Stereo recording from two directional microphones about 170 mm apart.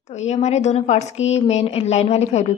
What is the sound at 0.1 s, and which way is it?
A woman's voice, 40° left (ahead or behind).